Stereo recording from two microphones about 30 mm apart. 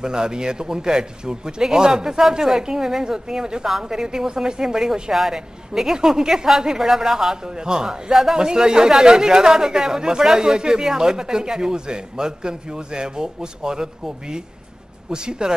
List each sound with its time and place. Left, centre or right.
0.0 s speech: right